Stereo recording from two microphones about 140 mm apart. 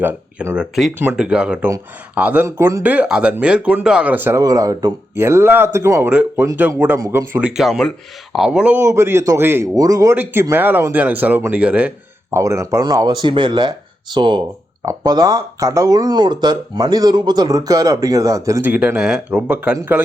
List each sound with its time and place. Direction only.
0.0 s speech: 15° right (ahead or behind)
4.4 s speech: 25° right (ahead or behind)
7.0 s speech: 25° right (ahead or behind)
7.3 s speech: 5° right (ahead or behind)
8.8 s speech: 20° right (ahead or behind)
12.3 s speech: 20° right (ahead or behind)
18.7 s speech: 10° right (ahead or behind)